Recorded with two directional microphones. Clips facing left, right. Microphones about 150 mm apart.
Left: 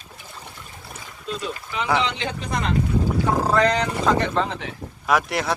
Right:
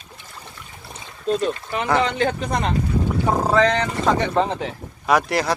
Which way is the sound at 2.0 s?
50° right (ahead or behind).